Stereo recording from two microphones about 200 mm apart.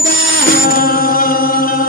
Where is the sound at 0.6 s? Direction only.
45° left (ahead or behind).